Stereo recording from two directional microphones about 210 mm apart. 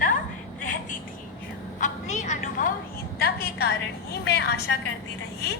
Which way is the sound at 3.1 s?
45° left (ahead or behind).